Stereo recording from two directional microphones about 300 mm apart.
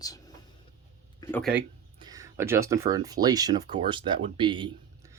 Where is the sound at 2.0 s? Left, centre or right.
Centre.